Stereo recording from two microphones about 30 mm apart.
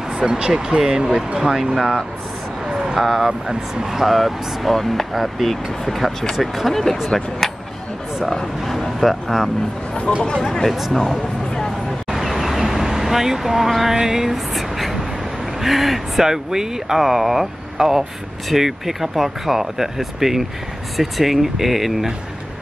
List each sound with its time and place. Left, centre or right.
0.1 s speech: right
3.0 s speech: centre
3.3 s speech: centre
4.0 s speech: centre
7.1 s speech: left
8.6 s a sound: centre
10.1 s speech: left
10.7 s speech: centre
12.1 s vehicle: centre
13.9 s speech: centre
14.5 s vehicle: centre
15.6 s speech: centre